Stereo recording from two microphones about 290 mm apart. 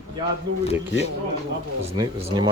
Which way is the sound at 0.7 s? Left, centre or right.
Left.